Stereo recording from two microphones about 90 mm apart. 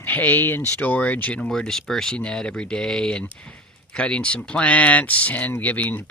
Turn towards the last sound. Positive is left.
turn(degrees=15)  # may be behind; listen again after turning